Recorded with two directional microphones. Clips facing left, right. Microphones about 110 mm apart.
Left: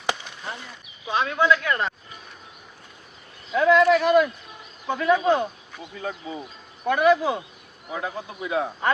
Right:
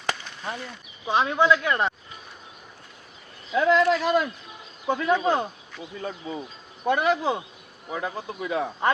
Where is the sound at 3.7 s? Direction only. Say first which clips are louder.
Left 4 dB; 30° right (ahead or behind).